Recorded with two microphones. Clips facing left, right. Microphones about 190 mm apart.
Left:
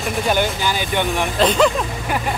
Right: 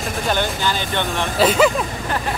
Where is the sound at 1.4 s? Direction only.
5° right (ahead or behind).